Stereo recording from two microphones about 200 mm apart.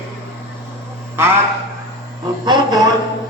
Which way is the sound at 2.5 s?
20° right (ahead or behind).